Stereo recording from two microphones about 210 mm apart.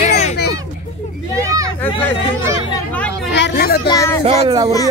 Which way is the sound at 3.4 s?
50° left (ahead or behind).